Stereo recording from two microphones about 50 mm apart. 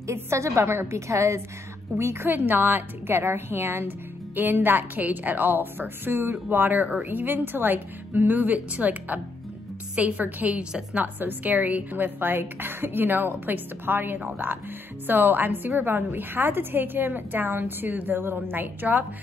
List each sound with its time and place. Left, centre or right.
0.0 s a woman's voice: right
2.0 s a woman's voice: right
2.2 s a woman's voice: right
10.6 s a woman's voice: centre
11.1 s a woman's voice: right